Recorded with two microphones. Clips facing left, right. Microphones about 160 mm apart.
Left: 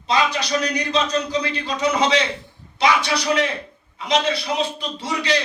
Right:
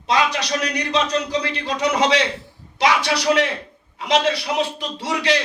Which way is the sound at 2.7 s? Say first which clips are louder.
Even; 90° right.